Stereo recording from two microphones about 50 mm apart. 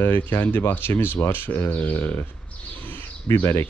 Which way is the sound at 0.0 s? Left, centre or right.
Left.